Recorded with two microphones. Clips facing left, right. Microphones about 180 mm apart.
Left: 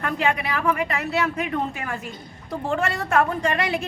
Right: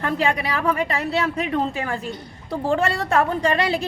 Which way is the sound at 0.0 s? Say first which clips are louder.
Right 2 dB; 35° right (ahead or behind).